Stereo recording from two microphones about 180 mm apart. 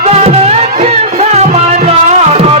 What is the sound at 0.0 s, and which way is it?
Music, 35° right (ahead or behind).